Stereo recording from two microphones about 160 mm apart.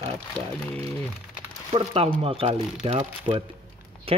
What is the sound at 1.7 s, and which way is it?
Speech, 35° right (ahead or behind).